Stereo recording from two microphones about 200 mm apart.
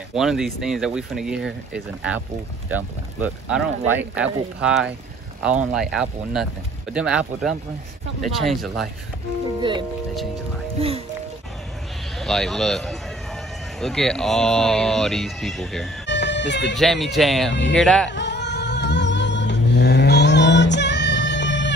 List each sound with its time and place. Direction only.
0.1 s speech: centre (ahead or behind)
9.6 s speech: 25° right (ahead or behind)
12.2 s speech: centre (ahead or behind)
16.1 s music: 60° left (ahead or behind)
16.7 s speech: centre (ahead or behind)
18.1 s music: 60° left (ahead or behind)